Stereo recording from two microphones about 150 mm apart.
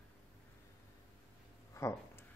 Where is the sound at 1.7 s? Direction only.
15° left (ahead or behind).